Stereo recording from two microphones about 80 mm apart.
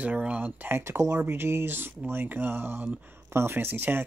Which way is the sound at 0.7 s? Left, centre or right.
Right.